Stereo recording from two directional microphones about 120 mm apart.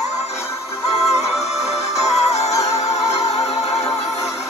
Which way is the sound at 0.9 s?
65° left (ahead or behind).